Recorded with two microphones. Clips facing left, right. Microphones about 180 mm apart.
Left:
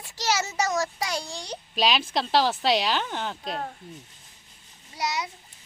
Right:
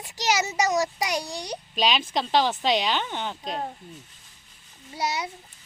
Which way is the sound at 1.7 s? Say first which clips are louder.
Even; 5° left (ahead or behind).